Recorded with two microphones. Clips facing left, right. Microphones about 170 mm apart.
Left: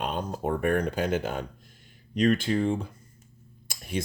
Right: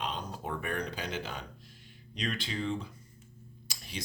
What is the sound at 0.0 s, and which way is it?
Speech, 50° left (ahead or behind).